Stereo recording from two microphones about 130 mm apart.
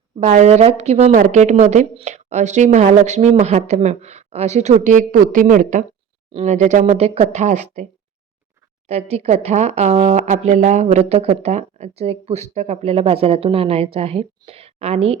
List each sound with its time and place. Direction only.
0.2 s a woman's voice: 70° right (ahead or behind)
6.3 s a woman's voice: 65° right (ahead or behind)
8.9 s a woman's voice: 55° right (ahead or behind)
10.1 s speech: 65° right (ahead or behind); by 15.2 s 50° right (ahead or behind)